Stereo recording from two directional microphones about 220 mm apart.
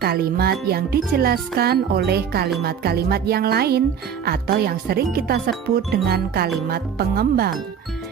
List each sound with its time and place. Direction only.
0.0 s speech: 45° right (ahead or behind)